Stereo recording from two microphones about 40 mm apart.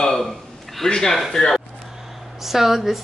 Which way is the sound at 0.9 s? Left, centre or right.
Centre.